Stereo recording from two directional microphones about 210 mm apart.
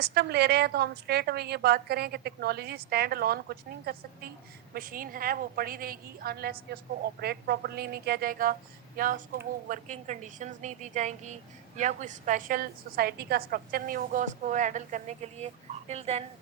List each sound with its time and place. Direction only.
0.0 s a woman's voice: 50° right (ahead or behind); by 16.2 s 30° right (ahead or behind)